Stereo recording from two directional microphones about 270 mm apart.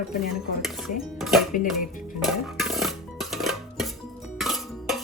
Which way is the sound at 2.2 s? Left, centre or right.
Centre.